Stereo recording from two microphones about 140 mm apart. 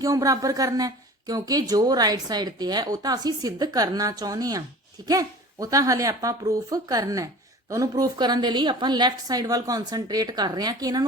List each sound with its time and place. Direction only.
0.0 s speech: 25° right (ahead or behind)